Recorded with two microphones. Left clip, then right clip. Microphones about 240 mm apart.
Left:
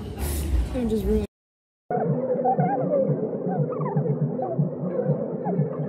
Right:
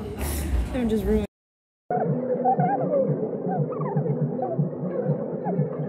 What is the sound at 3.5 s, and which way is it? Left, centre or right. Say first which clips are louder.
Throbbing: even; centre.